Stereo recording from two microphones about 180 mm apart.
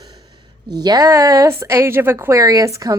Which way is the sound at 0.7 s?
20° right (ahead or behind).